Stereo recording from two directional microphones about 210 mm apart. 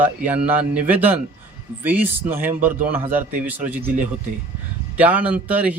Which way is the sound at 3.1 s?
40° right (ahead or behind).